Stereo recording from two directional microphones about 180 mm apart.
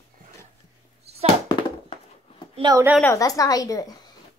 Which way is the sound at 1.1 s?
35° right (ahead or behind).